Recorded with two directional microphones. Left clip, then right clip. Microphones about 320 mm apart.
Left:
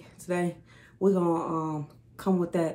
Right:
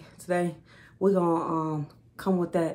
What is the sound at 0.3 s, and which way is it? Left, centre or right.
Speech, centre.